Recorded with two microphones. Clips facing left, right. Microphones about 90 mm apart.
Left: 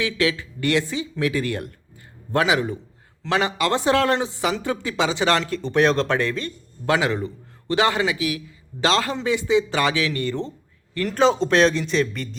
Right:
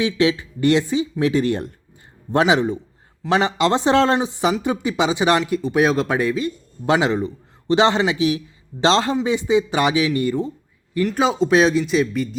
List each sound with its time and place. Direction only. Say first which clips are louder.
0.0 s speech: right 4 dB; 20° right (ahead or behind); by 12.4 s 5° right (ahead or behind)